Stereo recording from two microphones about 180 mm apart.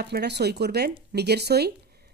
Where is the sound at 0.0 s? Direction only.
65° right (ahead or behind).